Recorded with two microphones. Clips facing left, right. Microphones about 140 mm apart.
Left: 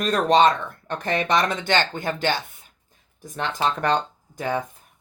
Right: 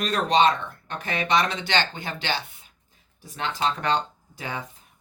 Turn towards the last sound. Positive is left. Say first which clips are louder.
# left 8 dB
turn(degrees=45)  # may be behind; listen again after turning